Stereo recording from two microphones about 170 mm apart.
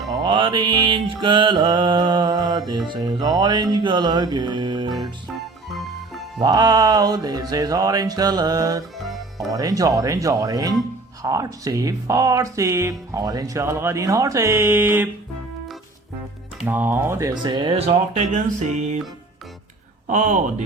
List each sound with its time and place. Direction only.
0.1 s mantra: 25° right (ahead or behind)
6.4 s mantra: 25° right (ahead or behind)
9.0 s music: centre (ahead or behind)
9.6 s mantra: 20° right (ahead or behind)
13.1 s speech: 20° right (ahead or behind)
16.6 s mantra: 10° right (ahead or behind); by 18.9 s 45° right (ahead or behind)
20.1 s speech: 45° right (ahead or behind)